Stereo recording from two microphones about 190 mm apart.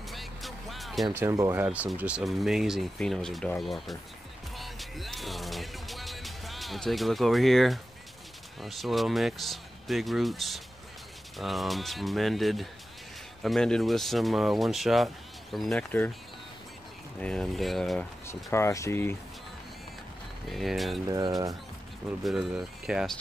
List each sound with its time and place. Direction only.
0.1 s music: centre (ahead or behind)
1.1 s speech: 15° right (ahead or behind); by 3.9 s centre (ahead or behind)
4.6 s music: centre (ahead or behind)
8.5 s speech: centre (ahead or behind)
17.2 s speech: 5° left (ahead or behind)
18.2 s speech: 15° left (ahead or behind)
20.4 s speech: centre (ahead or behind)
21.1 s speech: 20° right (ahead or behind)
22.2 s speech: centre (ahead or behind)